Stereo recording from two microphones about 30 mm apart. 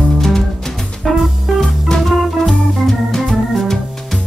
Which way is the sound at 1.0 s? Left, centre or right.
Centre.